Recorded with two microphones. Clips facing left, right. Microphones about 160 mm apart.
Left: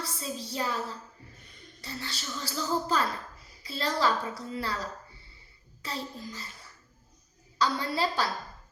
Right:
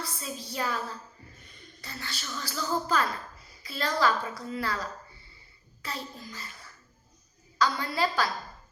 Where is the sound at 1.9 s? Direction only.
30° left (ahead or behind).